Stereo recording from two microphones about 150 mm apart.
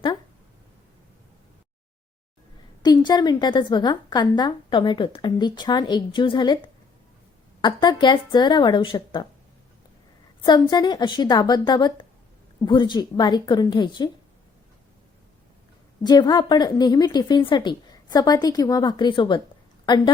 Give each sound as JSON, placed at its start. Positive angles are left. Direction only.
{"t": 2.8, "sound": "a woman's voice", "side_deg": 30}
{"t": 7.6, "sound": "a woman's voice", "side_deg": 30}
{"t": 10.4, "sound": "a woman's voice", "side_deg": 30}
{"t": 16.0, "sound": "a woman's voice", "side_deg": 30}